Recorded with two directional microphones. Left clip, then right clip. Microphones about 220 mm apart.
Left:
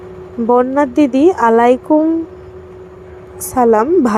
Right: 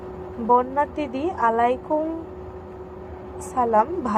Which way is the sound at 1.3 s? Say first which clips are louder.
Left 5 dB; 50° left (ahead or behind).